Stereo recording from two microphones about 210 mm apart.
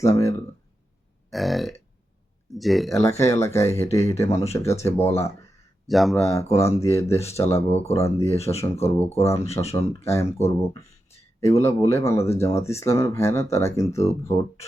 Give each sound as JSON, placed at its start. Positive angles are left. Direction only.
{"t": 0.0, "sound": "speech", "side_deg": 15}
{"t": 1.3, "sound": "burping", "side_deg": 0}
{"t": 3.0, "sound": "speech", "side_deg": 15}
{"t": 5.9, "sound": "burping", "side_deg": 0}
{"t": 6.2, "sound": "speech", "side_deg": 15}
{"t": 9.3, "sound": "speech", "side_deg": 30}
{"t": 10.0, "sound": "speech", "side_deg": 15}